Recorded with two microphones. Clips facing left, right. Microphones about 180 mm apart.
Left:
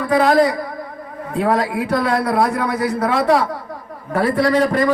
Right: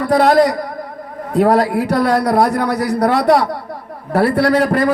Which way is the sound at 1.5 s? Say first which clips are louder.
Right 4 dB; 75° right (ahead or behind).